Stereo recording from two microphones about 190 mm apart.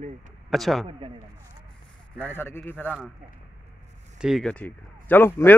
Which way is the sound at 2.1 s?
10° left (ahead or behind).